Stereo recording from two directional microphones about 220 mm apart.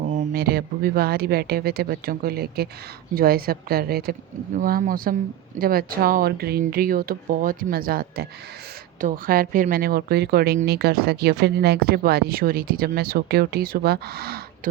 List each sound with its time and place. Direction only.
0.2 s a woman's voice: 45° right (ahead or behind)